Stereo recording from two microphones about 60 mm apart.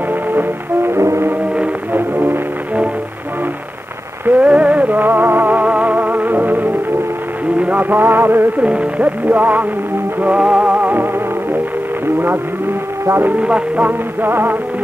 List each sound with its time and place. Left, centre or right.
0.3 s music: right
0.9 s brass instrument: right
2.0 s music: right
4.3 s music: right
8.6 s music: right
13.4 s music: right